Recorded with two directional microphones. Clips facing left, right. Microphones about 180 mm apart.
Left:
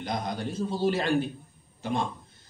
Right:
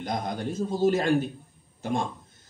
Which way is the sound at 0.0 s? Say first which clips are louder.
Right 1 dB; 50° right (ahead or behind).